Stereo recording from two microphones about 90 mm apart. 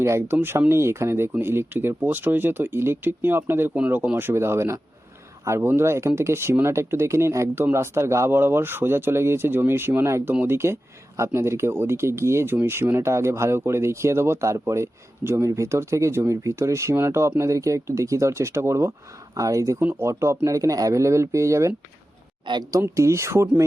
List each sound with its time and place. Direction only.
0.0 s speech: 25° right (ahead or behind)
19.8 s speech: 20° right (ahead or behind)
20.1 s speech: 35° right (ahead or behind)
22.5 s speech: 60° right (ahead or behind)
23.0 s speech: 30° right (ahead or behind)